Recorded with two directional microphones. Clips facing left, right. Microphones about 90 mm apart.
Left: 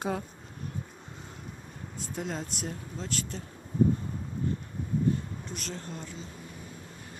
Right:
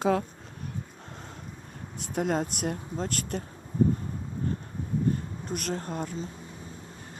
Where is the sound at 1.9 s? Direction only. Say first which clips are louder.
Right 8 dB; 65° right (ahead or behind).